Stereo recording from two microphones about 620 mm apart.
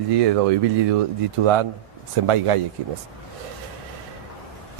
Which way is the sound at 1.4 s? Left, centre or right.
Right.